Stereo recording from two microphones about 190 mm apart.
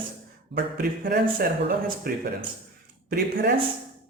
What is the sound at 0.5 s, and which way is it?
Speech, 55° right (ahead or behind).